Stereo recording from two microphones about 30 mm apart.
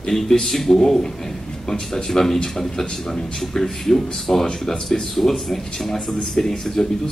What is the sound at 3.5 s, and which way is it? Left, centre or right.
Speech, centre.